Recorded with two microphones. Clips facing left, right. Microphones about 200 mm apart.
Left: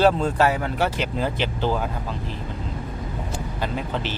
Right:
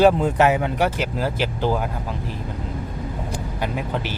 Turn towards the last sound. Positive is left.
turn(degrees=-10)  # may be behind; listen again after turning